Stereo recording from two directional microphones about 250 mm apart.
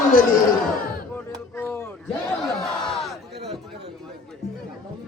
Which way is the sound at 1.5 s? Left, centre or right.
Centre.